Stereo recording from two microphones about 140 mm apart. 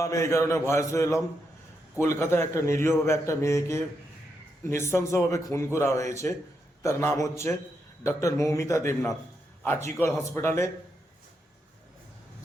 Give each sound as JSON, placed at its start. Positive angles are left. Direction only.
{"t": 0.0, "sound": "a man's voice", "side_deg": 20}